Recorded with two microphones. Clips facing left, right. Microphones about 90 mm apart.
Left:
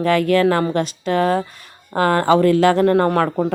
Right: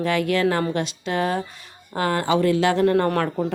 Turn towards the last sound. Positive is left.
turn(degrees=40)  # may be behind; listen again after turning